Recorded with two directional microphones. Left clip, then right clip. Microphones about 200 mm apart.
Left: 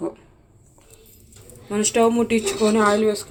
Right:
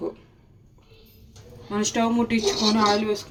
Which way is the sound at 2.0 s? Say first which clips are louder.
Left 7 dB; 15° left (ahead or behind).